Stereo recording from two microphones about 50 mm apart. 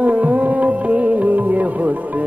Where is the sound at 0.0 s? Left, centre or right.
Right.